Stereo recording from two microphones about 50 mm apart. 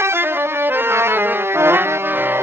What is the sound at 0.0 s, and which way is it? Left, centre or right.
Music, right.